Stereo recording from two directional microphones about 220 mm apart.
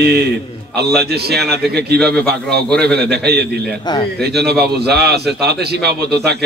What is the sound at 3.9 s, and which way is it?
Speech, 20° left (ahead or behind).